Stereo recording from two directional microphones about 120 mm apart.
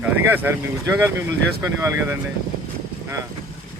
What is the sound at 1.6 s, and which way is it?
Speech, 20° right (ahead or behind).